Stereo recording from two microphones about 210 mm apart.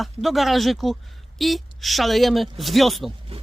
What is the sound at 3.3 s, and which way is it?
Speech, 25° right (ahead or behind).